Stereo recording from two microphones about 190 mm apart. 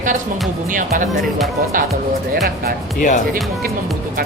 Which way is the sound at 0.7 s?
45° right (ahead or behind).